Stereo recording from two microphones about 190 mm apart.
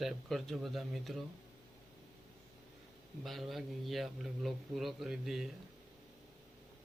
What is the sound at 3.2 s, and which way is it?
Speech, centre (ahead or behind).